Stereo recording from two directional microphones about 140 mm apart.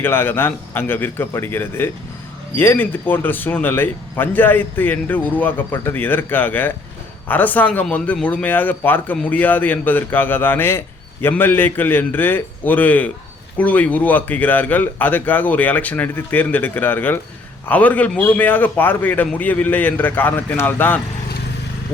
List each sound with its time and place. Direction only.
0.0 s speech: 15° left (ahead or behind)